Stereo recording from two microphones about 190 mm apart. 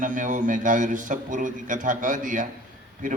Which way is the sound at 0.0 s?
45° right (ahead or behind).